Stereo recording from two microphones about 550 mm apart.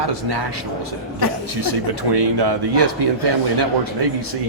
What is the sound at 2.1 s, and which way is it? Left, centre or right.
Speech, right.